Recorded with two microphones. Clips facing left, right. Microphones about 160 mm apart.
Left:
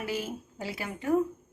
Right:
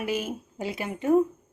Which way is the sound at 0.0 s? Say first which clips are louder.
Right 4 dB; 20° right (ahead or behind).